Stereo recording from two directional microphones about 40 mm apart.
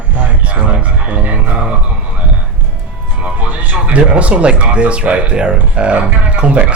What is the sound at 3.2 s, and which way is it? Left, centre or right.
Speech, right.